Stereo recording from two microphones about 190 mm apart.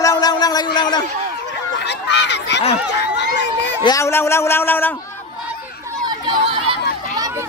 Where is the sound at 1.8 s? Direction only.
65° left (ahead or behind).